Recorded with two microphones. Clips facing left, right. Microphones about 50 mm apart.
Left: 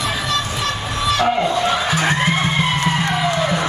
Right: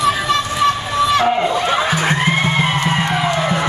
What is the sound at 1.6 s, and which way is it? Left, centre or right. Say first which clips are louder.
Music: right 2 dB; right.